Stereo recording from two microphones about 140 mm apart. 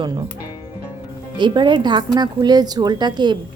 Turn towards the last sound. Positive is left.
turn(degrees=-30)  # may be behind; listen again after turning